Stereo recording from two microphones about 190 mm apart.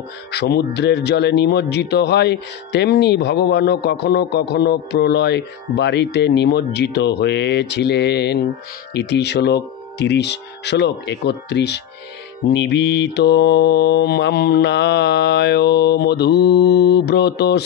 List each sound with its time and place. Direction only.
0.3 s speech: 60° left (ahead or behind)